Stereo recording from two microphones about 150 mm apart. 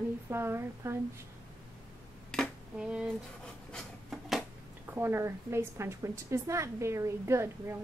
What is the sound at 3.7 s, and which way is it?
Rub, centre (ahead or behind).